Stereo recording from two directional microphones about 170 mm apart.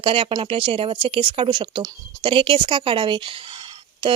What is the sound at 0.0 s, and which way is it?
Speech, 30° right (ahead or behind).